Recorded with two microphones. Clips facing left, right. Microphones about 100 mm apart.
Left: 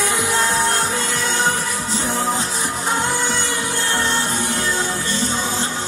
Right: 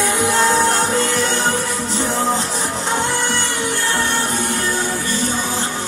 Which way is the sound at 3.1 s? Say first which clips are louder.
Right 1 dB; 15° left (ahead or behind).